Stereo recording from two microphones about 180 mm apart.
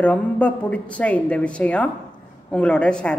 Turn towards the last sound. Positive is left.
turn(degrees=5)  # may be behind; listen again after turning